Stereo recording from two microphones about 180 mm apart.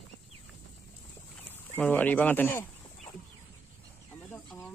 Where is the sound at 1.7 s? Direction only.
10° left (ahead or behind).